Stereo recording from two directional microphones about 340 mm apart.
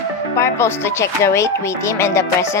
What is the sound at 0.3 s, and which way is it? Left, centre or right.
Music, centre.